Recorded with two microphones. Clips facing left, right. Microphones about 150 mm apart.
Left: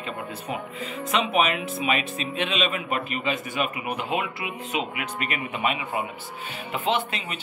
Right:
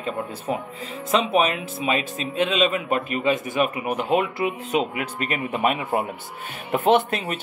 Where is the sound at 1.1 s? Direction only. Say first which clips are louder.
Right 3 dB; 30° right (ahead or behind).